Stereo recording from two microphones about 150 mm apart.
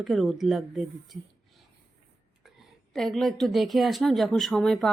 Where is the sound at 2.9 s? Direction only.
Centre (ahead or behind).